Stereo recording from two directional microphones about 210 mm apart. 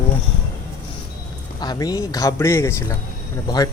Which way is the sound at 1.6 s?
20° left (ahead or behind).